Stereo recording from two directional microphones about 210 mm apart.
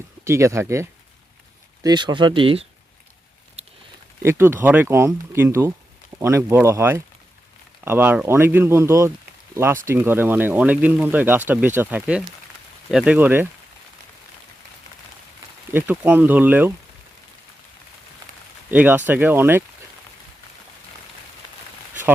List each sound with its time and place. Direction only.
0.3 s speech: 15° right (ahead or behind)
4.2 s speech: 10° right (ahead or behind)
15.7 s speech: 10° right (ahead or behind)
18.7 s speech: 10° right (ahead or behind)